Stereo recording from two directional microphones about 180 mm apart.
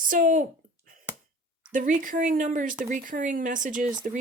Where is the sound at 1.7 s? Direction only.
45° right (ahead or behind).